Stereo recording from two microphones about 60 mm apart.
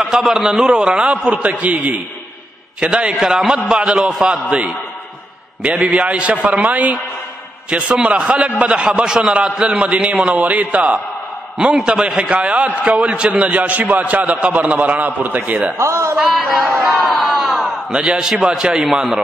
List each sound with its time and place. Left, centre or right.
0.2 s a man's voice: centre
3.2 s a man's voice: centre
5.8 s a man's voice: right
15.9 s a man's voice: right
16.3 s speech: centre
16.8 s crowd: centre
17.9 s a man's voice: centre